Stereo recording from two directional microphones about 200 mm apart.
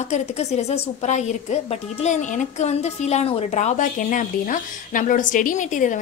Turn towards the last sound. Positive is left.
turn(degrees=40)  # may be behind; listen again after turning